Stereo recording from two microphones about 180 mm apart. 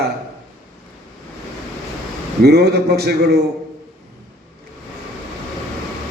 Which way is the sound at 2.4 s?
60° right (ahead or behind).